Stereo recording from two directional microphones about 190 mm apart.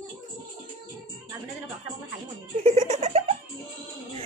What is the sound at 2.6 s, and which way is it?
Giggle, 40° right (ahead or behind).